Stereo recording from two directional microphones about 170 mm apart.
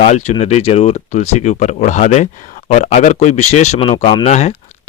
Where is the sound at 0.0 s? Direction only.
40° left (ahead or behind).